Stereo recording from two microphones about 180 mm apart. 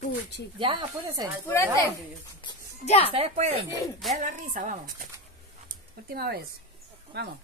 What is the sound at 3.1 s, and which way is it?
Speech, 35° right (ahead or behind).